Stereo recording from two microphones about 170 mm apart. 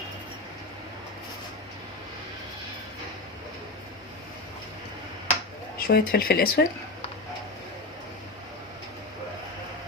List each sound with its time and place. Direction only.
5.7 s speech: 65° left (ahead or behind)